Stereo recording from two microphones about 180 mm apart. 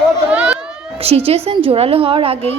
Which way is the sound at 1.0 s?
35° right (ahead or behind).